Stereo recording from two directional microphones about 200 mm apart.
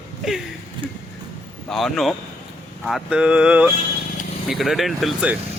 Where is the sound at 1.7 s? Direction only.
Centre (ahead or behind).